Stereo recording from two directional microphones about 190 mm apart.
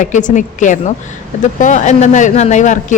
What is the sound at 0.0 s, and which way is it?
A man's voice, 40° left (ahead or behind).